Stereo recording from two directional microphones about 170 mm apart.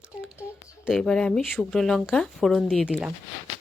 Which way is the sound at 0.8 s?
Centre (ahead or behind).